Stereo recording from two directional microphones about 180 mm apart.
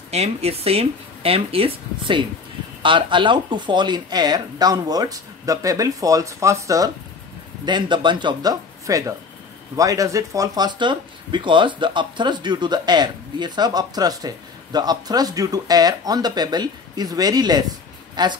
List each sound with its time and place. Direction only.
0.1 s speech: 35° right (ahead or behind)